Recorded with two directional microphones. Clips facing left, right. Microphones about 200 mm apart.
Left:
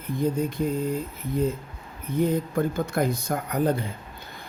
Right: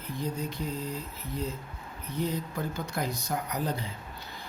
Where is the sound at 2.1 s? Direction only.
50° left (ahead or behind).